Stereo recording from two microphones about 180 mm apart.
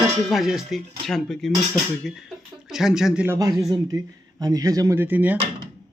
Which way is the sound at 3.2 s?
15° right (ahead or behind).